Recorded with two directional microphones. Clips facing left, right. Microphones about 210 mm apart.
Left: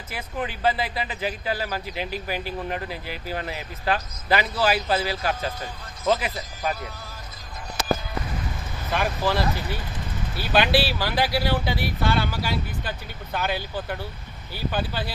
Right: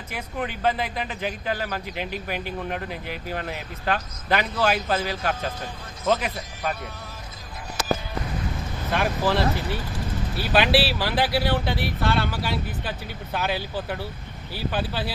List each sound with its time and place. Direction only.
0.1 s speech: 5° left (ahead or behind)
8.9 s speech: centre (ahead or behind)